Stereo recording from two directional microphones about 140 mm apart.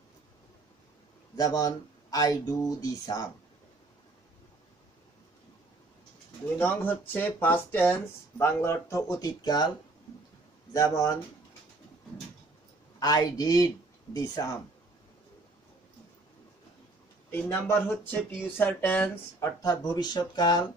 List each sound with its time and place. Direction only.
1.3 s speech: 25° left (ahead or behind)
6.6 s speech: 15° left (ahead or behind)
10.7 s speech: 25° left (ahead or behind)
13.0 s speech: 30° left (ahead or behind)
17.3 s speech: 15° left (ahead or behind)
19.6 s speech: 25° left (ahead or behind)